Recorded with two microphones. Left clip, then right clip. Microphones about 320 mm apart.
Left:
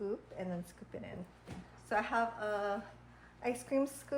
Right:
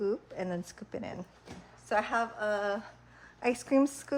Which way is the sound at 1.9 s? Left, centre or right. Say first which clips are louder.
Right 4 dB; right.